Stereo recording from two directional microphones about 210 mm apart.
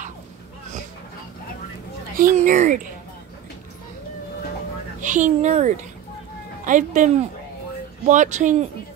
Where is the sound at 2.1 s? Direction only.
40° right (ahead or behind).